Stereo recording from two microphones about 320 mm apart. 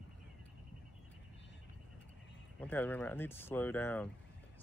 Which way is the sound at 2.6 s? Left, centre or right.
Centre.